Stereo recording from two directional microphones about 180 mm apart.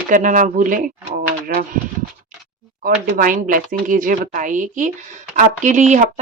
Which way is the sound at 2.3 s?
45° right (ahead or behind).